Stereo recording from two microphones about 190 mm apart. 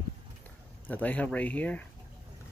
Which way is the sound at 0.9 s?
10° left (ahead or behind).